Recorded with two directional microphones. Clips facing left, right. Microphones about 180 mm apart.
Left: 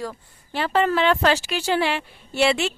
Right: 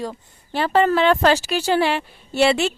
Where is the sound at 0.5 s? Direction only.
35° right (ahead or behind).